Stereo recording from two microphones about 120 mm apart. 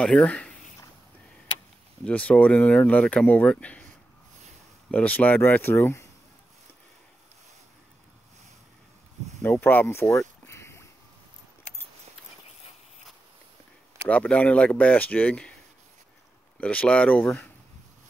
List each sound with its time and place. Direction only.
0.0 s speech: 5° left (ahead or behind)
2.0 s speech: 10° left (ahead or behind)
4.9 s speech: 10° left (ahead or behind)
9.4 s a sound: 20° left (ahead or behind)
14.0 s speech: 10° left (ahead or behind)
16.5 s speech: 10° left (ahead or behind)